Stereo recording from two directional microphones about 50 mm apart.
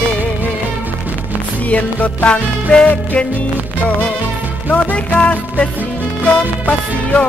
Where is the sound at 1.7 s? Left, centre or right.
Left.